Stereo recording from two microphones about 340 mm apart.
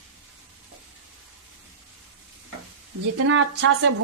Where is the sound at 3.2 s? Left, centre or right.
Right.